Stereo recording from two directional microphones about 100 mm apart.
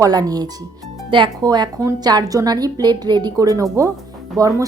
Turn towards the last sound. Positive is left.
turn(degrees=-35)  # may be behind; listen again after turning